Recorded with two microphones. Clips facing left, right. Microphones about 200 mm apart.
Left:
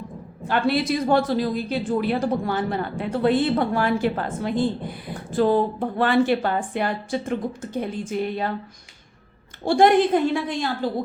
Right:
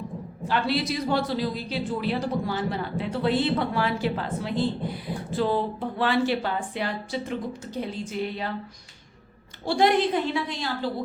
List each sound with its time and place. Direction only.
0.4 s a woman's voice: 55° left (ahead or behind)
9.6 s a woman's voice: 50° left (ahead or behind)